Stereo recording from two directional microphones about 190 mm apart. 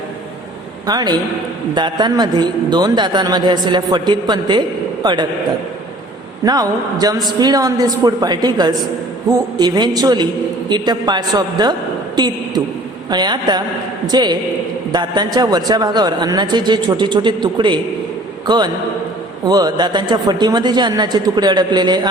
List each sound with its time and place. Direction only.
0.9 s a man's voice: 20° right (ahead or behind)
6.4 s a man's voice: 20° right (ahead or behind)